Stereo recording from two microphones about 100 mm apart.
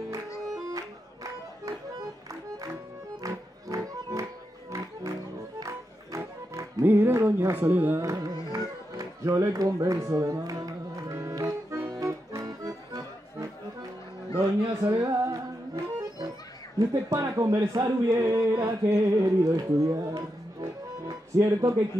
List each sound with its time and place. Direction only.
2.5 s music: 35° right (ahead or behind)
8.0 s music: 35° right (ahead or behind)
16.7 s speech: 35° right (ahead or behind)